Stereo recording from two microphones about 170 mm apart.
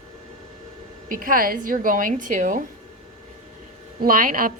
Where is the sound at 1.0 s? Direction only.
55° right (ahead or behind).